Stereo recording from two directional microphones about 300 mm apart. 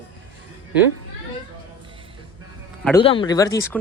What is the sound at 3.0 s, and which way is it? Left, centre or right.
Speech, centre.